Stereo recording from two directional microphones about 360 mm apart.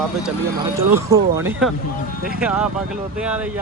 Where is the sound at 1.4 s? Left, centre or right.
Centre.